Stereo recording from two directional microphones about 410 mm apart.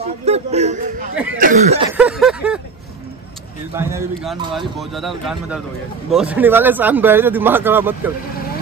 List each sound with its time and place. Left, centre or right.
0.0 s speech: centre
1.1 s speech: centre
1.4 s speech: centre
2.0 s a man's voice: centre
3.7 s a man's voice: centre